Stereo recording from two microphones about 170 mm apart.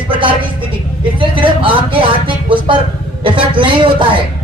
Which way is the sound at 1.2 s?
30° right (ahead or behind).